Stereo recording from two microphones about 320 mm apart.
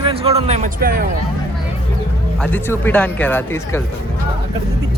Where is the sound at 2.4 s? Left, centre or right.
Centre.